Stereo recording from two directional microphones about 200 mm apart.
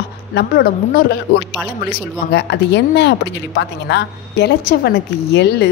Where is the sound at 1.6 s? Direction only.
5° right (ahead or behind).